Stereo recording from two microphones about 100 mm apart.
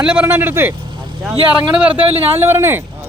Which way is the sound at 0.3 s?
20° right (ahead or behind).